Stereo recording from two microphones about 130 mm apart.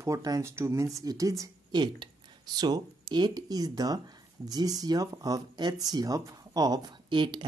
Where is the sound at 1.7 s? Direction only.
35° right (ahead or behind).